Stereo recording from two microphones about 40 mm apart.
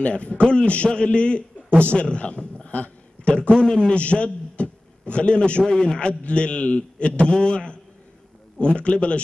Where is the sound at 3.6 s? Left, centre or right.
Centre.